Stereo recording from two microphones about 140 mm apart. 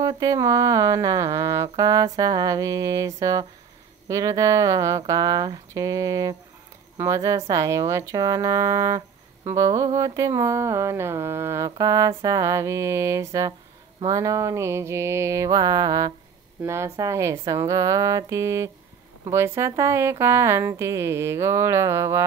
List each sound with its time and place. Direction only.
0.0 s speech: 25° right (ahead or behind)